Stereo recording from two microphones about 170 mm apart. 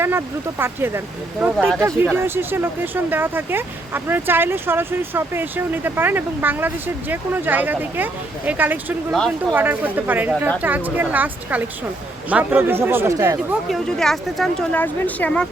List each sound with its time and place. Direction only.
0.0 s speech: 15° right (ahead or behind)
13.7 s speech: centre (ahead or behind)